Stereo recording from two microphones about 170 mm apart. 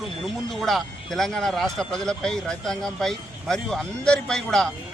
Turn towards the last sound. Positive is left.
turn(degrees=5)  # may be behind; listen again after turning